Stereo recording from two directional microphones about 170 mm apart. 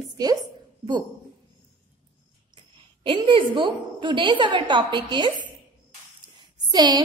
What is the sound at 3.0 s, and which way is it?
A woman's voice, 30° right (ahead or behind).